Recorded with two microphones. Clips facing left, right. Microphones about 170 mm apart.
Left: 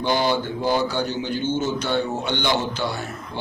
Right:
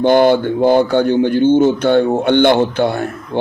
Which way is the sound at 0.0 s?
55° right (ahead or behind).